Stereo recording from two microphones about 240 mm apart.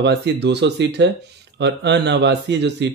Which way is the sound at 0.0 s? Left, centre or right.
Right.